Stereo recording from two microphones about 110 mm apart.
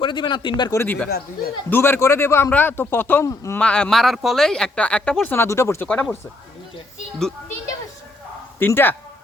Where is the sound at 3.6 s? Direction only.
10° left (ahead or behind).